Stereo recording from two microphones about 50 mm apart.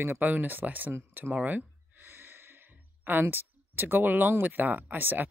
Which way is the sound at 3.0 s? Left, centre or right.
Right.